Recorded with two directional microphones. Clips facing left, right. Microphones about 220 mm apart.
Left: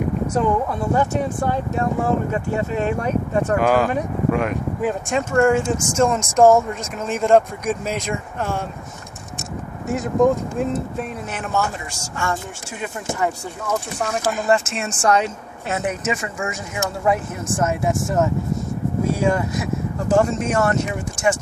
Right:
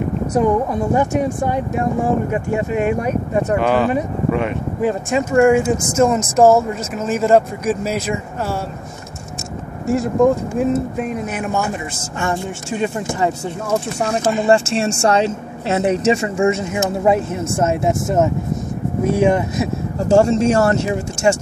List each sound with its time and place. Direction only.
0.4 s speech: 15° right (ahead or behind)
3.6 s speech: 10° left (ahead or behind)
9.8 s a woman's voice: 5° right (ahead or behind); by 21.4 s 30° right (ahead or behind)